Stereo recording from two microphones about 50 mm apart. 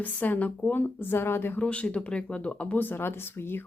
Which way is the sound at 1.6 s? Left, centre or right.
Left.